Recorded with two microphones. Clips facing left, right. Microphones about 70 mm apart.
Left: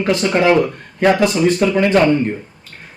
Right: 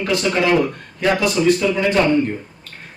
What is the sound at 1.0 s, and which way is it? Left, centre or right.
Speech, left.